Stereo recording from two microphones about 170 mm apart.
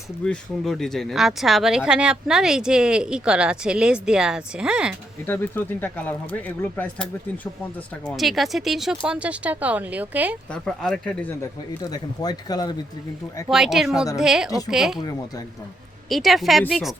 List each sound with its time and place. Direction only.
0.3 s speech: centre (ahead or behind)
5.2 s speech: 10° left (ahead or behind); by 10.3 s 10° right (ahead or behind)
10.5 s speech: 5° left (ahead or behind)
11.8 s speech: 25° left (ahead or behind)
13.5 s speech: 5° right (ahead or behind)
16.0 s speech: centre (ahead or behind)